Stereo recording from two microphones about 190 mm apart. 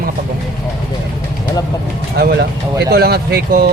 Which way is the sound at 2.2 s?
55° right (ahead or behind).